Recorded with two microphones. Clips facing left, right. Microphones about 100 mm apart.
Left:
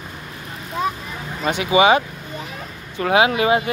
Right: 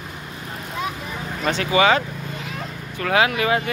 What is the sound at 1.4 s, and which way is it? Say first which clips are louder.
Speech: left 3 dB; 15° left (ahead or behind).